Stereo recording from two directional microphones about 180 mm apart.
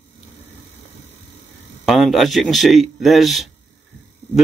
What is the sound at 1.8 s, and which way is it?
A man's voice, centre (ahead or behind).